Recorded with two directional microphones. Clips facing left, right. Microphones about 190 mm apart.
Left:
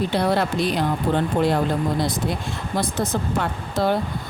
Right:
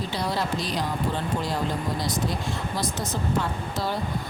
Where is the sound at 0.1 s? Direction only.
60° left (ahead or behind).